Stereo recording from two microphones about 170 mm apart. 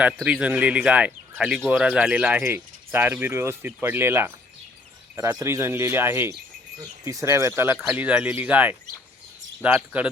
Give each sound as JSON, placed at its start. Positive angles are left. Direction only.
{"t": 0.3, "sound": "speech", "side_deg": -5}